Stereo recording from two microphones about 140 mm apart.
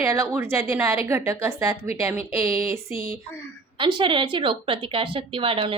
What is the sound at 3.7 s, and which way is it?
A woman's voice, 35° right (ahead or behind).